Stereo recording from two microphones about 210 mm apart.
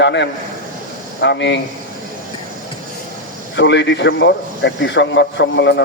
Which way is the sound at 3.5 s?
55° left (ahead or behind).